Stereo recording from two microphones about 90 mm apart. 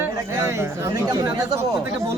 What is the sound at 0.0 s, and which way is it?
Speech, 30° right (ahead or behind).